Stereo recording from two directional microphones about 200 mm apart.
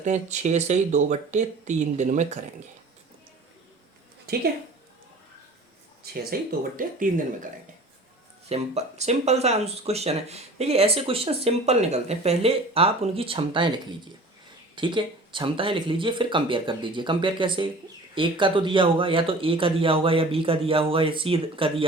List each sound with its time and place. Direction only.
0.0 s speech: 35° right (ahead or behind)
6.5 s speech: 45° right (ahead or behind)
8.4 s speech: 30° right (ahead or behind)